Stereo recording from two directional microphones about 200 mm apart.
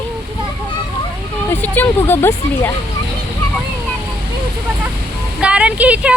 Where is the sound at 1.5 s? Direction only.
10° left (ahead or behind).